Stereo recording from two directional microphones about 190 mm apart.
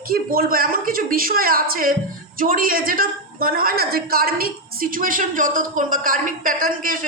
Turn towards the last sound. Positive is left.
turn(degrees=-45)  # may be behind; listen again after turning